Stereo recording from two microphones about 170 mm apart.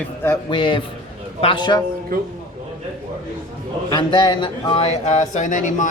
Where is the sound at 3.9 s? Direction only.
30° left (ahead or behind).